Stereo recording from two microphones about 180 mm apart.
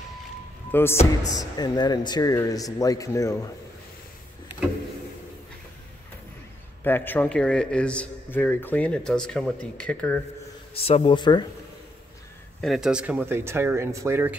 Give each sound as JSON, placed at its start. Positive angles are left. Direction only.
{"t": 0.7, "sound": "speech", "side_deg": 10}
{"t": 1.3, "sound": "speech", "side_deg": 20}
{"t": 6.8, "sound": "a man's voice", "side_deg": 10}
{"t": 10.7, "sound": "speech", "side_deg": 35}
{"t": 12.6, "sound": "speech", "side_deg": 0}